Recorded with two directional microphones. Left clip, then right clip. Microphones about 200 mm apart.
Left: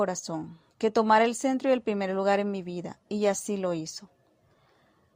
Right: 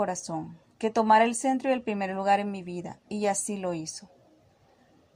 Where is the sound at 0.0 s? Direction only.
40° left (ahead or behind).